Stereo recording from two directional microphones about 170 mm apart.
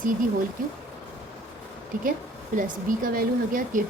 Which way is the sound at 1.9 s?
50° right (ahead or behind).